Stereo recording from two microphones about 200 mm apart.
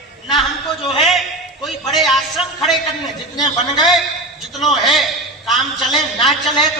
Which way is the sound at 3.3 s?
Centre (ahead or behind).